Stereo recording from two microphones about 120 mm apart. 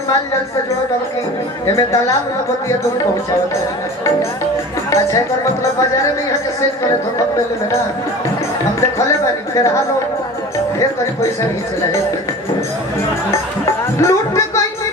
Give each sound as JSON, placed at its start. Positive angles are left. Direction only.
{"t": 1.6, "sound": "speech", "side_deg": 30}
{"t": 10.8, "sound": "speech", "side_deg": 25}
{"t": 14.0, "sound": "speech", "side_deg": 25}